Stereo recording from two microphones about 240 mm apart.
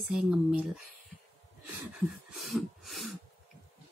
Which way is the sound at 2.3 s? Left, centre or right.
Centre.